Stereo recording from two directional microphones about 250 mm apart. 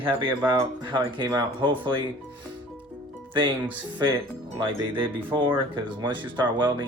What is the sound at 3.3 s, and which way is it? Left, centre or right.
Speech, centre.